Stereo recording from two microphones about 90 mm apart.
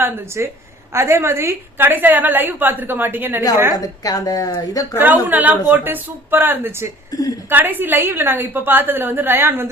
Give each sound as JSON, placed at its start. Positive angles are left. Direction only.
{"t": 0.0, "sound": "a woman's voice", "side_deg": -30}
{"t": 3.8, "sound": "a woman's voice", "side_deg": 45}
{"t": 4.9, "sound": "a woman's voice", "side_deg": -20}
{"t": 7.1, "sound": "a woman's voice", "side_deg": 40}
{"t": 7.5, "sound": "a woman's voice", "side_deg": -20}